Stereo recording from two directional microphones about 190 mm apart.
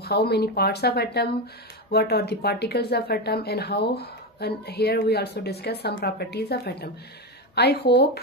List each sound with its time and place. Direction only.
0.0 s speech: 55° left (ahead or behind)